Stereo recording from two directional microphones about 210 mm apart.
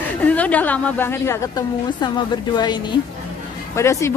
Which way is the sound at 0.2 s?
5° left (ahead or behind).